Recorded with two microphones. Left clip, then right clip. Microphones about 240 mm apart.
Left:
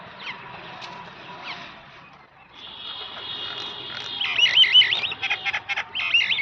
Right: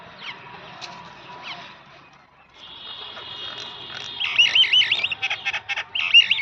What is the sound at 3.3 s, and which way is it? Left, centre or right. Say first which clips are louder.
Frog: left 3 dB; left.